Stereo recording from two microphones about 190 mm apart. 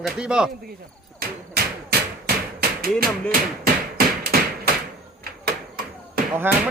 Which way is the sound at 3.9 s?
50° right (ahead or behind).